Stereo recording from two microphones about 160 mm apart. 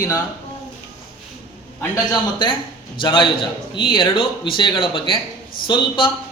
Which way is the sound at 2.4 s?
30° left (ahead or behind).